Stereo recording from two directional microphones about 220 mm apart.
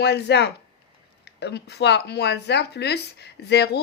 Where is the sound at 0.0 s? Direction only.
50° left (ahead or behind).